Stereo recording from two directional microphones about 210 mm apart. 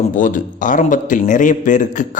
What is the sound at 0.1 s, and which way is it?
A man's voice, 40° left (ahead or behind).